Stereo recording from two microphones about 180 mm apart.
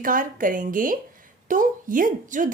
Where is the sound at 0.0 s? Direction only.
50° right (ahead or behind).